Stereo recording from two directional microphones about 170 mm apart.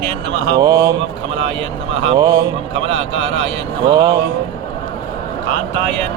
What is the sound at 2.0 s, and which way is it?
A man's voice, 25° right (ahead or behind).